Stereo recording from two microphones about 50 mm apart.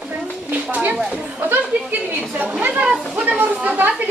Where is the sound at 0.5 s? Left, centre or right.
Right.